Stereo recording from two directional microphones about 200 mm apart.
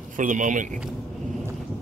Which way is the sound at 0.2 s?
40° right (ahead or behind).